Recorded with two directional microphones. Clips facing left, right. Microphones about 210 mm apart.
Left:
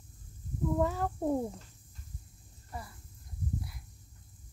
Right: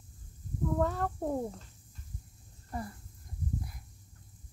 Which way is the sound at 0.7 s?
5° left (ahead or behind).